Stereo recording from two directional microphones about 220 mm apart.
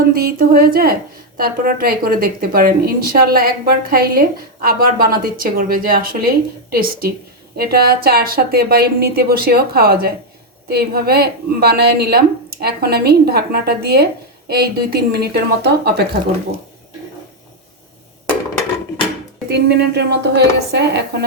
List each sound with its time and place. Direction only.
0.1 s a woman's voice: 40° right (ahead or behind)
19.5 s a woman's voice: 50° right (ahead or behind)